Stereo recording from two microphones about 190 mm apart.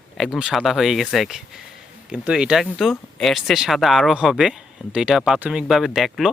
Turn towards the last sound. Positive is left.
turn(degrees=0)  # may be behind; listen again after turning